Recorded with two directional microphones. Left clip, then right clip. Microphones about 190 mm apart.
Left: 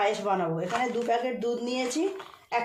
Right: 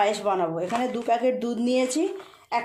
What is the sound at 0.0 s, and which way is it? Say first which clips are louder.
A woman's voice: right 3 dB; 55° right (ahead or behind).